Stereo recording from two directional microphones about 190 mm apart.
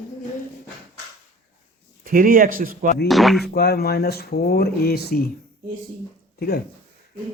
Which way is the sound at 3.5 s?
55° left (ahead or behind).